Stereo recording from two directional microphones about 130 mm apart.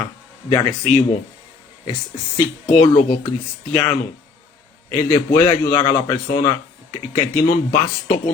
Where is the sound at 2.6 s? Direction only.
55° left (ahead or behind).